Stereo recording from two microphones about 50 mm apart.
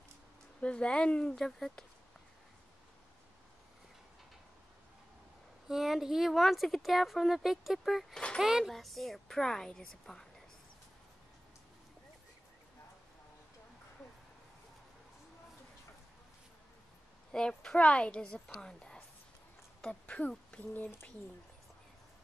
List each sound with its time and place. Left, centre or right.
0.6 s a woman's voice: left
1.3 s a woman's voice: centre
5.7 s a woman's voice: centre
8.1 s a woman's voice: centre
8.4 s speech: centre
8.6 s a woman's voice: centre
17.3 s a woman's voice: centre; by 20.9 s left